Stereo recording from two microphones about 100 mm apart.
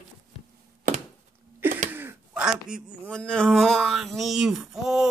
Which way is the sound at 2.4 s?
10° right (ahead or behind).